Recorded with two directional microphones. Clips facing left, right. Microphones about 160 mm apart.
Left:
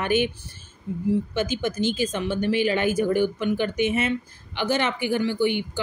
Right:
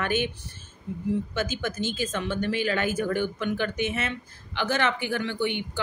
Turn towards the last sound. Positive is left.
turn(degrees=10)  # may be behind; listen again after turning